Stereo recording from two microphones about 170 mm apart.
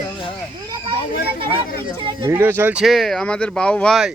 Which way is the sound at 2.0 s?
30° right (ahead or behind).